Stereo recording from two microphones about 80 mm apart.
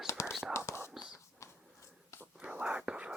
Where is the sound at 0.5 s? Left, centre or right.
Left.